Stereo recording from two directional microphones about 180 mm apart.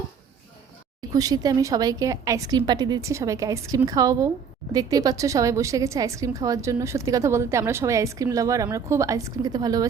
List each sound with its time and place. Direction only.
1.1 s a woman's voice: 20° right (ahead or behind)